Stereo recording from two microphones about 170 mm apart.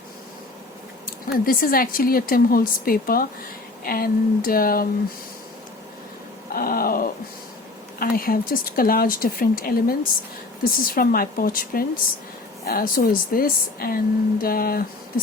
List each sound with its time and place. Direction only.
1.0 s speech: 60° left (ahead or behind)
6.5 s a sound: 60° left (ahead or behind)
7.9 s speech: 60° left (ahead or behind)